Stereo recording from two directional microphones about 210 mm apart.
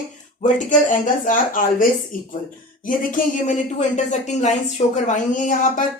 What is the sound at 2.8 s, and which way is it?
Speech, 40° left (ahead or behind).